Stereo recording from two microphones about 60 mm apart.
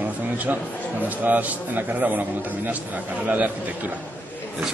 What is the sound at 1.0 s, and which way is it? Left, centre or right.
A man's voice, right.